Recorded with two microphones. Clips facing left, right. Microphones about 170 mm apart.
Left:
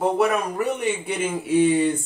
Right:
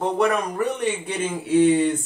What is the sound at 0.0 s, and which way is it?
Speech, 5° left (ahead or behind).